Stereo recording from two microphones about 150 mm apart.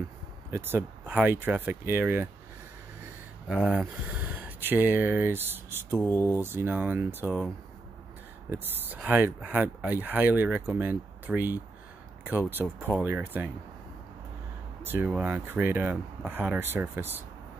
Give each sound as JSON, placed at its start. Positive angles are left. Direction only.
{"t": 0.5, "sound": "speech", "side_deg": -15}
{"t": 3.4, "sound": "speech", "side_deg": -5}
{"t": 5.9, "sound": "speech", "side_deg": 15}
{"t": 6.4, "sound": "speech", "side_deg": -15}
{"t": 8.5, "sound": "speech", "side_deg": -10}
{"t": 14.8, "sound": "speech", "side_deg": -15}